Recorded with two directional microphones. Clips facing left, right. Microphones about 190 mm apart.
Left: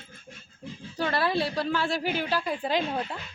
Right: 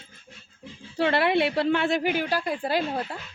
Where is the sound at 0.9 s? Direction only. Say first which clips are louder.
Right 4 dB; 25° right (ahead or behind); by 3.2 s 10° right (ahead or behind).